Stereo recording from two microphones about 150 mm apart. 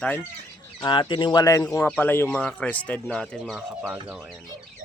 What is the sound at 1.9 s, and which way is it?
Speech, 10° left (ahead or behind).